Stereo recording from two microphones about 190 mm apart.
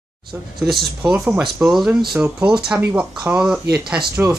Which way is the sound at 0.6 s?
Centre (ahead or behind).